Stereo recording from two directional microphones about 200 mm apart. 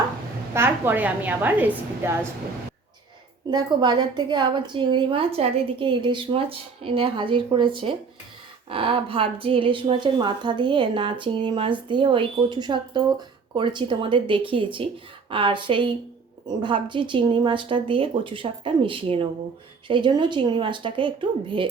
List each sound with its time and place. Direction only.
0.5 s a woman's voice: 10° right (ahead or behind)
3.5 s a woman's voice: 20° right (ahead or behind)